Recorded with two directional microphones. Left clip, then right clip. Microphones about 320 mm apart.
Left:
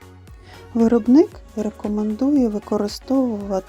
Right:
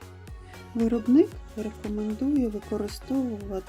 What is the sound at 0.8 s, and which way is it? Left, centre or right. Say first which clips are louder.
Speech: left 7 dB; centre.